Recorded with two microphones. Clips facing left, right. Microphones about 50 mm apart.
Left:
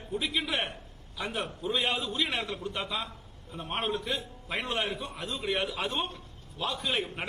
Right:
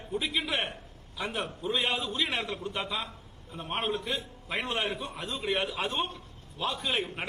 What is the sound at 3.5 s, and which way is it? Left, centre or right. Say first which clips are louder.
A man's voice: even; right.